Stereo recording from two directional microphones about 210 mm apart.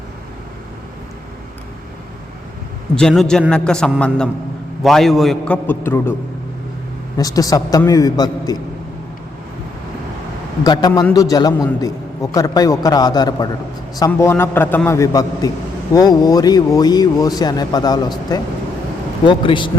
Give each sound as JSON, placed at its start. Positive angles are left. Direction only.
{"t": 2.9, "sound": "a man's voice", "side_deg": 5}
{"t": 7.2, "sound": "a man's voice", "side_deg": 15}
{"t": 10.6, "sound": "a man's voice", "side_deg": 20}
{"t": 19.2, "sound": "a man's voice", "side_deg": 25}